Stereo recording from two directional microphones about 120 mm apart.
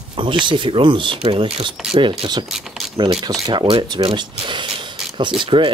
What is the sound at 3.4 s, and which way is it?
Speech, 45° right (ahead or behind).